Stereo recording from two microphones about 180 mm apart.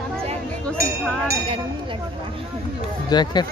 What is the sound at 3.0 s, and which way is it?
Speech, 25° left (ahead or behind).